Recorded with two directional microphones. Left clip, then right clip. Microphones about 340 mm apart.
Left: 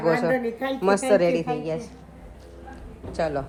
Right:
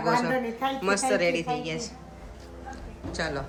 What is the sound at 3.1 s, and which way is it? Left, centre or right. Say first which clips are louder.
Speech: left 5 dB; centre.